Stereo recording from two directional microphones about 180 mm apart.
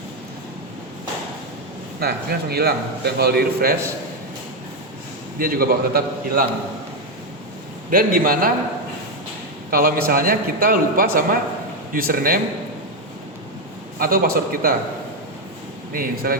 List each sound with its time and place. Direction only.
2.0 s a man's voice: 60° right (ahead or behind)
5.4 s a man's voice: 55° right (ahead or behind)
7.9 s a man's voice: 50° right (ahead or behind)
9.6 s a man's voice: 55° right (ahead or behind)
14.0 s a man's voice: 55° right (ahead or behind)
15.9 s a man's voice: 55° right (ahead or behind)